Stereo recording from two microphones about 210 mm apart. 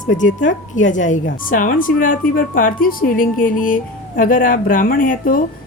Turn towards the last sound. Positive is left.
turn(degrees=40)  # may be behind; listen again after turning